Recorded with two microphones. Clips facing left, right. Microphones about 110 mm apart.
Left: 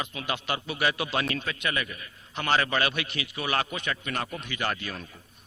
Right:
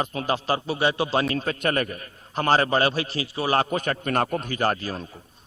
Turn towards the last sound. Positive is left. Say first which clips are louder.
# right 7 dB
turn(degrees=-35)  # may be behind; listen again after turning